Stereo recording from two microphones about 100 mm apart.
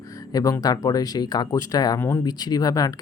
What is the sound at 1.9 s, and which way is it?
Speech, 25° left (ahead or behind).